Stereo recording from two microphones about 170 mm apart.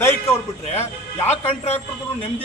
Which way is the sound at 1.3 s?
40° left (ahead or behind).